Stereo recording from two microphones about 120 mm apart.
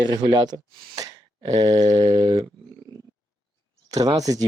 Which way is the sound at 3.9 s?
30° right (ahead or behind).